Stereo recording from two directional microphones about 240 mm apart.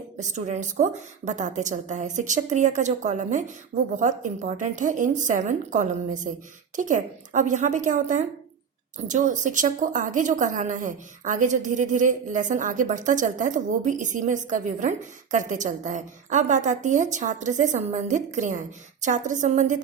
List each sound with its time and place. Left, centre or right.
0.2 s a woman's voice: right